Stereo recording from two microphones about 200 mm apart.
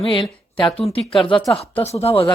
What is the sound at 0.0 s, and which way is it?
Speech, 25° left (ahead or behind).